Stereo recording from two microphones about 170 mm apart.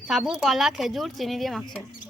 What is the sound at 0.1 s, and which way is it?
A woman's voice, centre (ahead or behind).